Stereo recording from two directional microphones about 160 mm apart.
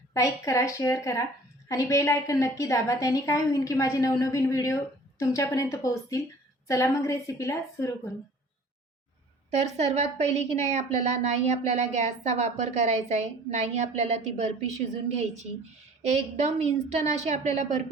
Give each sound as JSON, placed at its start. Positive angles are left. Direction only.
{"t": 0.1, "sound": "a woman's voice", "side_deg": 20}
{"t": 9.5, "sound": "a woman's voice", "side_deg": -40}
{"t": 16.9, "sound": "a woman's voice", "side_deg": -45}